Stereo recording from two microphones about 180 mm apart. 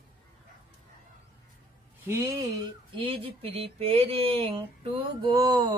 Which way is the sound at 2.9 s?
30° right (ahead or behind).